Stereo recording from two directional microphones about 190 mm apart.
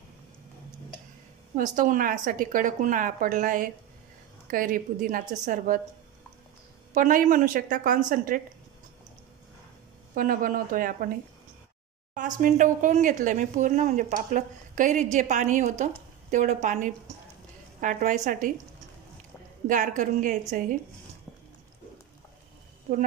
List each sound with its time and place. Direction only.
1.6 s speech: 45° right (ahead or behind)
6.9 s speech: 45° right (ahead or behind)
10.1 s speech: 45° right (ahead or behind)
12.1 s speech: 45° right (ahead or behind)
19.7 s speech: 40° right (ahead or behind)